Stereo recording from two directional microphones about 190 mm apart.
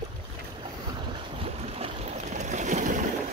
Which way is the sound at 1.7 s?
35° right (ahead or behind).